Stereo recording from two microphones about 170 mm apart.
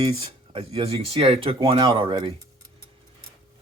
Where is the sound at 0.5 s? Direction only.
35° right (ahead or behind).